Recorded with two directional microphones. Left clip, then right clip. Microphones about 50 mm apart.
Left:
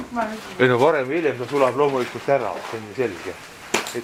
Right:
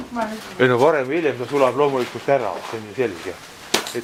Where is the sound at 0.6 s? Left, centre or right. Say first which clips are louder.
Right 1 dB; right.